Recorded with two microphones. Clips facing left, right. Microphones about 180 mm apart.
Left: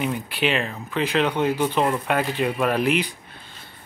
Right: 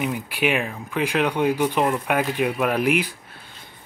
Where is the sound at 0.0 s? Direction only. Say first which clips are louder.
Even; 10° right (ahead or behind).